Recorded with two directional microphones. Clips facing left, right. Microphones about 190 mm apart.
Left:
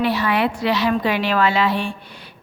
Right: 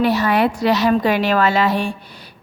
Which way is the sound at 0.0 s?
45° right (ahead or behind).